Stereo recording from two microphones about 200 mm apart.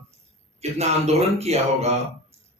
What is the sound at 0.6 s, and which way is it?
Speech, 30° right (ahead or behind).